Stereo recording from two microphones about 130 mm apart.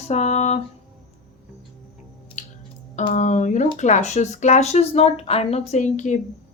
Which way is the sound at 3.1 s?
70° left (ahead or behind).